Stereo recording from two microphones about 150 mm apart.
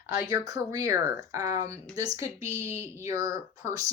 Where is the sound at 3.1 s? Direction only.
20° right (ahead or behind).